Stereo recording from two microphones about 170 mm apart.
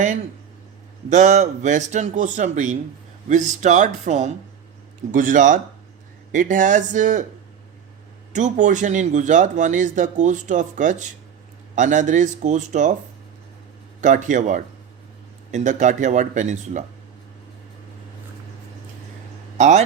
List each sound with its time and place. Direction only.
1.1 s speech: 45° right (ahead or behind)
8.3 s speech: 45° right (ahead or behind)
14.0 s speech: 45° right (ahead or behind)
19.5 s speech: 45° right (ahead or behind)